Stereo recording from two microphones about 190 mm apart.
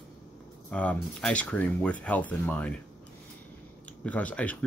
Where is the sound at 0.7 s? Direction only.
5° left (ahead or behind).